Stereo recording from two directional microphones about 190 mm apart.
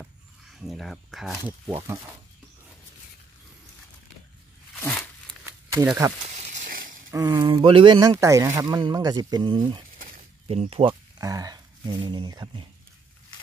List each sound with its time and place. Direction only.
0.6 s speech: centre (ahead or behind)
4.7 s a sound: 10° left (ahead or behind)
5.4 s a sound: 10° right (ahead or behind)
6.3 s snake: 35° right (ahead or behind)
7.1 s speech: 15° right (ahead or behind)
7.5 s speech: 30° right (ahead or behind)